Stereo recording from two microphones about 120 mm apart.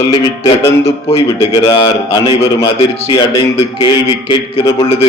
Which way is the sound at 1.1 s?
30° left (ahead or behind).